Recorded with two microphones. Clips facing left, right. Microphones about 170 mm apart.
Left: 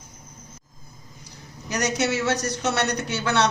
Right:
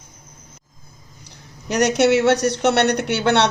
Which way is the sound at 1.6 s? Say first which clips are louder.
Right 8 dB; 65° right (ahead or behind).